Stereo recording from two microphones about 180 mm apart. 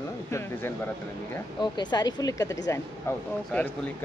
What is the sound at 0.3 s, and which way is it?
Speech, 15° left (ahead or behind).